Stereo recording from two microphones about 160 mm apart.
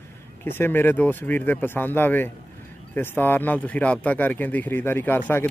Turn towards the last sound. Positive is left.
turn(degrees=10)  # may be behind; listen again after turning